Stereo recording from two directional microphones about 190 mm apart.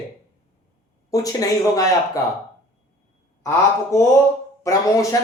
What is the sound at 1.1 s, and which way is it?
Speech, 20° left (ahead or behind).